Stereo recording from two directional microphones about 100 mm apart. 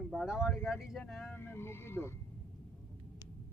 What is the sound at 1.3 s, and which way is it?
Speech, 20° left (ahead or behind).